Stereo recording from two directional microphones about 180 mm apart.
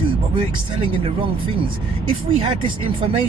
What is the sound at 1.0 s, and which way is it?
Speech, 30° right (ahead or behind).